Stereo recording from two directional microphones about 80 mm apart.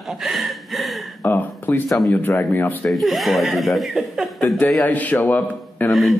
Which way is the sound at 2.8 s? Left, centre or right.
Centre.